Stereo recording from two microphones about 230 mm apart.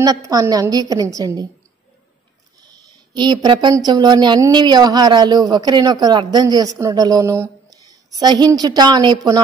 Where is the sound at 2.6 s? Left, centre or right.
Centre.